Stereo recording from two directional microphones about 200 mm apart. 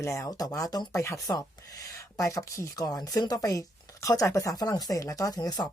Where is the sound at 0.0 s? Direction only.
15° left (ahead or behind).